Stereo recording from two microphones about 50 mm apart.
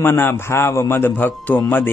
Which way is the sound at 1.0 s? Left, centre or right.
Left.